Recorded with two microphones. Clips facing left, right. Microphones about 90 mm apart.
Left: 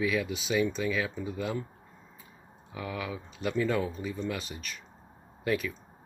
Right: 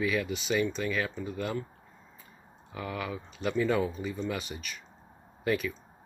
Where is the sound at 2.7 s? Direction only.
Centre (ahead or behind).